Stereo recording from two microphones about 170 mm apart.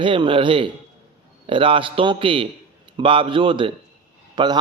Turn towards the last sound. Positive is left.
turn(degrees=-25)  # may be behind; listen again after turning